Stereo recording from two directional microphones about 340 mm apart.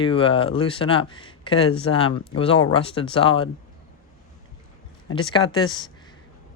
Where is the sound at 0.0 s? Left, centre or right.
Centre.